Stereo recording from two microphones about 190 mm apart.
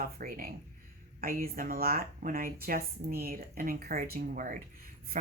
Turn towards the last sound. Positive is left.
turn(degrees=-50)  # may be behind; listen again after turning